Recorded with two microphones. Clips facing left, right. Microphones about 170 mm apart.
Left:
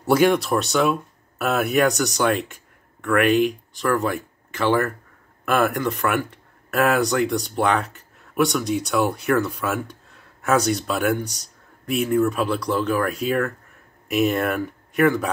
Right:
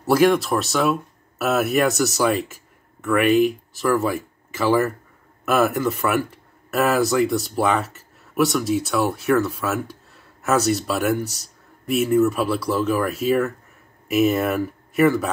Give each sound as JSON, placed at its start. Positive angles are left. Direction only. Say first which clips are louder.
{"t": 0.0, "sound": "speech", "louder": "right 1 dB", "side_deg": 0}